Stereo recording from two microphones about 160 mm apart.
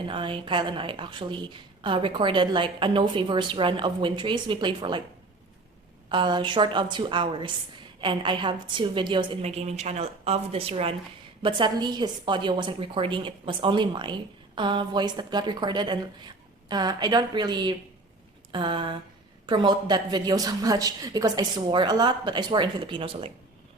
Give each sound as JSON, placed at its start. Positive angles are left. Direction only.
{"t": 0.0, "sound": "a woman's voice", "side_deg": -30}
{"t": 6.1, "sound": "a woman's voice", "side_deg": -30}
{"t": 9.4, "sound": "a woman's voice", "side_deg": -40}